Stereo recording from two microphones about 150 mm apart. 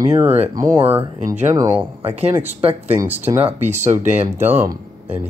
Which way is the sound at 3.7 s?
50° right (ahead or behind).